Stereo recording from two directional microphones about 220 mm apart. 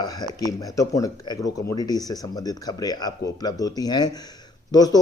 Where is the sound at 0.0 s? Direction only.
15° left (ahead or behind).